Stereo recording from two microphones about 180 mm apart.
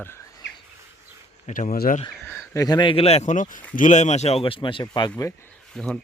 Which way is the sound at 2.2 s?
10° left (ahead or behind).